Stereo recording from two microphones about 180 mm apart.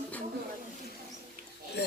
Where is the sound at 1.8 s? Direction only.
65° left (ahead or behind).